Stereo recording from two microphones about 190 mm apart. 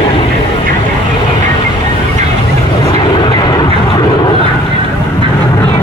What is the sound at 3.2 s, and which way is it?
Vehicle, 25° left (ahead or behind).